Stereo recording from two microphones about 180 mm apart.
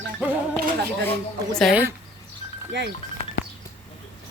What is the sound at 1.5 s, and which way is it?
Speech, centre (ahead or behind).